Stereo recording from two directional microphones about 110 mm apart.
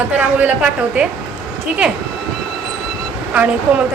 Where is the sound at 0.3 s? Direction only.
10° right (ahead or behind).